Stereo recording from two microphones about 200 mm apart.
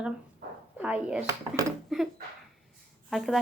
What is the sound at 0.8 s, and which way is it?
Chopping, 5° right (ahead or behind).